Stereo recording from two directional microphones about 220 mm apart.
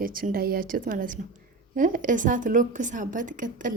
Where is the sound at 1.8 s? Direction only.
40° right (ahead or behind).